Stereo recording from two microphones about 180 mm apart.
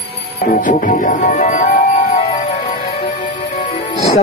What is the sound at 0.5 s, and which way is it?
Speech, 45° left (ahead or behind).